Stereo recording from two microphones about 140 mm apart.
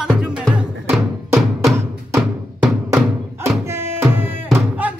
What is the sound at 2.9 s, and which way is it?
Music, 20° right (ahead or behind).